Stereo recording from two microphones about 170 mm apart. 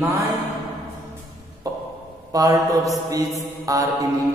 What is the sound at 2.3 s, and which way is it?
Speech, 20° right (ahead or behind).